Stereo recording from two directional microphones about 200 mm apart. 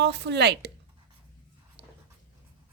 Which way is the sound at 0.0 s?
60° right (ahead or behind).